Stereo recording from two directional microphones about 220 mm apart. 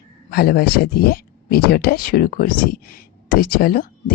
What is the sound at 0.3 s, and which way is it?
Speech, 45° left (ahead or behind).